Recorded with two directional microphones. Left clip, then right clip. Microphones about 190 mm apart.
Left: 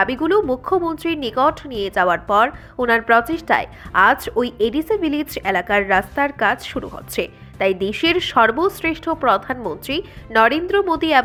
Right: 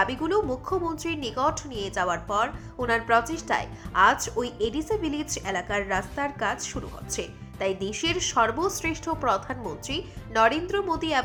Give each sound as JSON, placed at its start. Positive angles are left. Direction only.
{"t": 0.0, "sound": "speech", "side_deg": 20}